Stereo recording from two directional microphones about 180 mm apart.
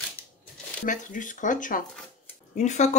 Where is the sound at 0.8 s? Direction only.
45° left (ahead or behind).